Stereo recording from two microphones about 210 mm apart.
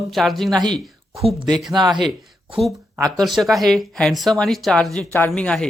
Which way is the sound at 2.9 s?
15° right (ahead or behind).